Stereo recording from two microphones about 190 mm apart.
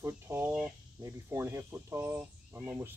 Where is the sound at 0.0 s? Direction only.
10° right (ahead or behind).